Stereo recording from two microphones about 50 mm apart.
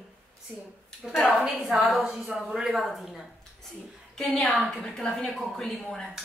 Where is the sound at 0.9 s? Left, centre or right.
Centre.